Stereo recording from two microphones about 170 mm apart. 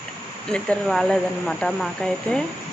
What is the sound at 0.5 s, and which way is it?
Speech, 5° left (ahead or behind).